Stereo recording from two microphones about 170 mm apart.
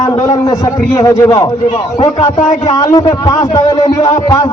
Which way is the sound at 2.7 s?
25° left (ahead or behind).